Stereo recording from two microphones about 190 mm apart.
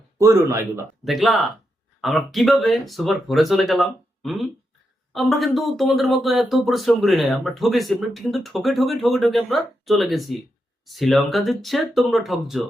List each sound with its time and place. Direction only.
0.2 s speech: 15° right (ahead or behind)
1.0 s speech: centre (ahead or behind)